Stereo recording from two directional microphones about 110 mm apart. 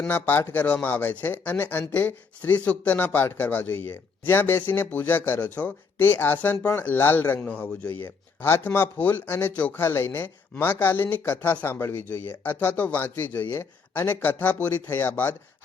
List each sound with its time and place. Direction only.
0.1 s speech: 15° left (ahead or behind)